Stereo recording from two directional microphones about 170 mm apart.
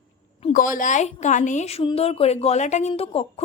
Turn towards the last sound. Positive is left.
turn(degrees=35)  # may be behind; listen again after turning